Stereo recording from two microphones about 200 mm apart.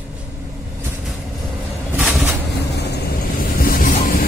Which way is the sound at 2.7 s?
55° left (ahead or behind).